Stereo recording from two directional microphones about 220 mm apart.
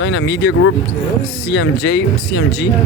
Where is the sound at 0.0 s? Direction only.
60° left (ahead or behind).